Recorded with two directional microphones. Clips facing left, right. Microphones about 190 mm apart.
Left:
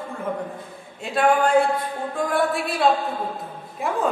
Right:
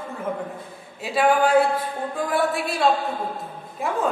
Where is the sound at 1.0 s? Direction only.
5° right (ahead or behind).